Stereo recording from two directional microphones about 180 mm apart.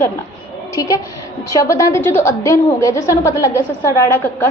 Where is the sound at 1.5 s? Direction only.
20° left (ahead or behind).